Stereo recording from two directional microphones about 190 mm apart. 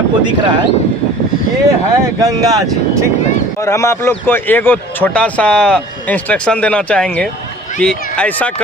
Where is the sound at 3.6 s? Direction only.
15° left (ahead or behind).